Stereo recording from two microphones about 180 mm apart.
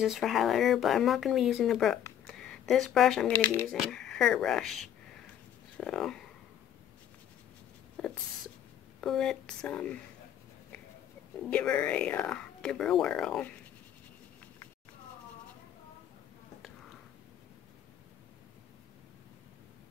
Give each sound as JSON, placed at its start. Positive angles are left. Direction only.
{"t": 0.0, "sound": "speech", "side_deg": 0}
{"t": 8.0, "sound": "a sound", "side_deg": 5}
{"t": 9.0, "sound": "speech", "side_deg": 0}
{"t": 11.5, "sound": "speech", "side_deg": 10}